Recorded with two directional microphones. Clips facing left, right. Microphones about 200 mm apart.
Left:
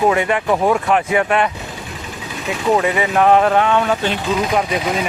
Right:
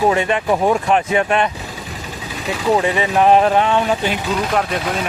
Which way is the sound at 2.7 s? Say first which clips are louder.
Even; 30° right (ahead or behind).